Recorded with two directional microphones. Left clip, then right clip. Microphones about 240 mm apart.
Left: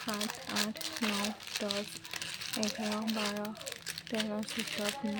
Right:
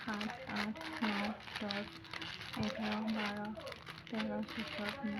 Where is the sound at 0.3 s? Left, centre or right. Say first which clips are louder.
Left 5 dB; left.